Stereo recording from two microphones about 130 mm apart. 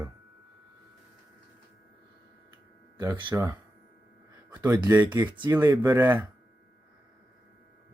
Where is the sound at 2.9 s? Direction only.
35° right (ahead or behind).